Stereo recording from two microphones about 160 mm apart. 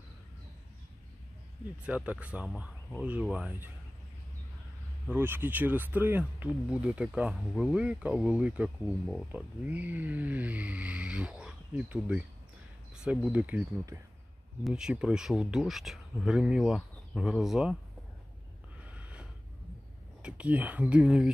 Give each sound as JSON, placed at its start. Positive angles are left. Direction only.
{"t": 1.9, "sound": "speech", "side_deg": -10}
{"t": 5.1, "sound": "speech", "side_deg": -15}
{"t": 14.6, "sound": "speech", "side_deg": -5}
{"t": 18.9, "sound": "a sound", "side_deg": -10}
{"t": 20.2, "sound": "speech", "side_deg": -5}